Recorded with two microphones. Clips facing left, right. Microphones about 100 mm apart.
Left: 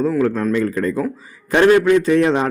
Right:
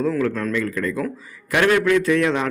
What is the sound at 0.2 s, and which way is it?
Speech, 25° left (ahead or behind).